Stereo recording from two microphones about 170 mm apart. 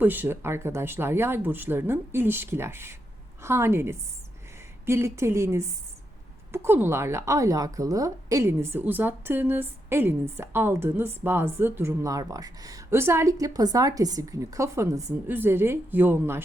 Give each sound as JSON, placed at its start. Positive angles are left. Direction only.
{"t": 0.0, "sound": "a woman's voice", "side_deg": -10}